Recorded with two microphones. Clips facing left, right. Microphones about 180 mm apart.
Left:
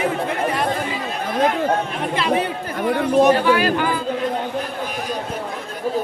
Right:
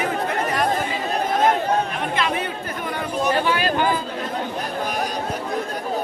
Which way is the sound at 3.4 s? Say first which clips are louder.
Left 4 dB; 20° right (ahead or behind).